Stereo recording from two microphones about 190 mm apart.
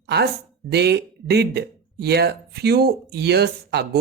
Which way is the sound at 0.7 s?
60° right (ahead or behind).